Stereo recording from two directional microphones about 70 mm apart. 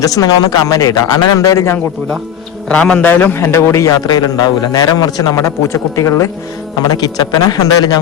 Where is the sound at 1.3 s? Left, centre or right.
Left.